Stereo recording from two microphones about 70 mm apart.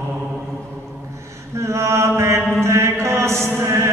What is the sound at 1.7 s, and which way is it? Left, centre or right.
Mantra, right.